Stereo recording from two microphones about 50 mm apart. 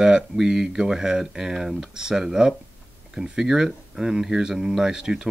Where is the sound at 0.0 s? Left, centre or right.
Centre.